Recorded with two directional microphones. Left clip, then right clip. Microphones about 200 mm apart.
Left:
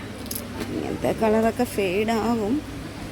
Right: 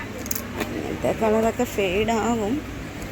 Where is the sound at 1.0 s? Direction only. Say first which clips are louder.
Even; 15° left (ahead or behind).